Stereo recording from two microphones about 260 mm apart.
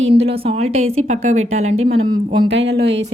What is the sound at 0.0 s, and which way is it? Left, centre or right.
A woman's voice, right.